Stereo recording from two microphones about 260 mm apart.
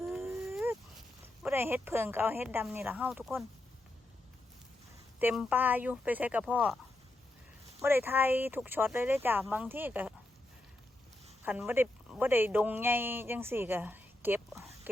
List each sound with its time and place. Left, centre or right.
0.0 s a sound: centre
1.4 s speech: centre
5.2 s speech: centre
7.8 s speech: centre
11.4 s speech: centre